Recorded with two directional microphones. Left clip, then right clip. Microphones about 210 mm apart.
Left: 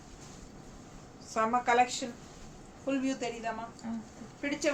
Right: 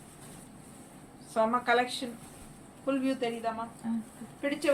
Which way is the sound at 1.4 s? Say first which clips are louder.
Even; 10° left (ahead or behind).